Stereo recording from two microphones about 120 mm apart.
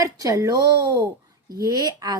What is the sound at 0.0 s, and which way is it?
A woman's voice, 30° right (ahead or behind).